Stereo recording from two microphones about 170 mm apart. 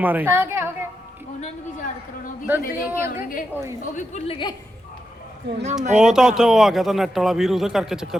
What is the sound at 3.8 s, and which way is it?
Speech, 45° left (ahead or behind).